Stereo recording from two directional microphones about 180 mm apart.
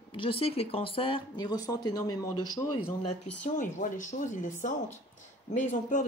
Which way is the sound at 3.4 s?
45° left (ahead or behind).